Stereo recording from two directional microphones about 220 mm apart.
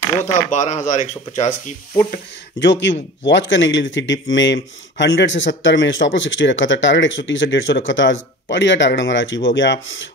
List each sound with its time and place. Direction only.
0.5 s speech: 35° left (ahead or behind)
2.6 s speech: 55° left (ahead or behind)